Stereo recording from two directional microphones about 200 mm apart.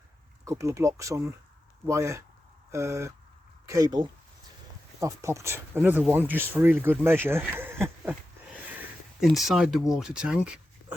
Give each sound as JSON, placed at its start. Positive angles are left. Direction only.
{"t": 0.4, "sound": "speech", "side_deg": -15}
{"t": 9.2, "sound": "speech", "side_deg": 0}